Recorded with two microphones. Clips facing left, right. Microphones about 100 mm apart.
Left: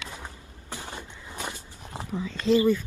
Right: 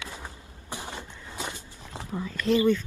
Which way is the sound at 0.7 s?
20° right (ahead or behind).